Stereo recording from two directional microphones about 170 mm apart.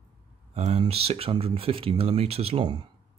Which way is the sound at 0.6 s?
40° right (ahead or behind).